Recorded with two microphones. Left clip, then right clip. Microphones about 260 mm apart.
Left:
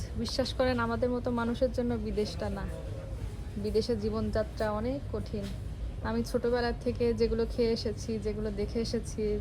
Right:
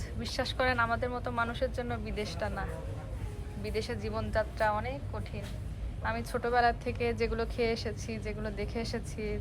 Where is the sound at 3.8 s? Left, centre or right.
Centre.